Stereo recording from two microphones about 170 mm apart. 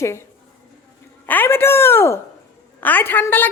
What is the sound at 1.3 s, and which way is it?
A woman's voice, 10° left (ahead or behind).